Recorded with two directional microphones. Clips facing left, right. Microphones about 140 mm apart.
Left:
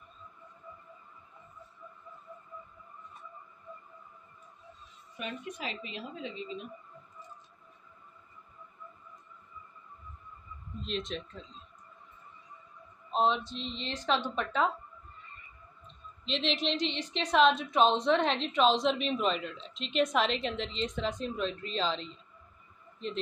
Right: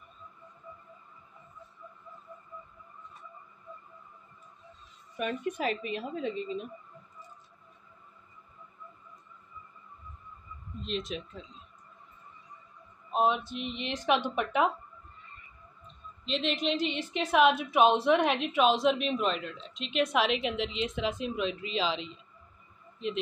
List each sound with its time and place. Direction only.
5.1 s a woman's voice: 50° right (ahead or behind)
10.8 s a woman's voice: 5° right (ahead or behind)
13.1 s a woman's voice: 10° right (ahead or behind)
16.3 s a woman's voice: centre (ahead or behind)